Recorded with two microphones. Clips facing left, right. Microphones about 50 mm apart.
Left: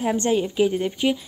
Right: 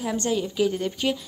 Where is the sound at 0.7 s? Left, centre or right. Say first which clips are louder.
Left 3 dB; centre.